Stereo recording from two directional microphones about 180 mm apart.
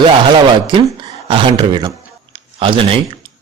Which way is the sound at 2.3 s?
30° right (ahead or behind).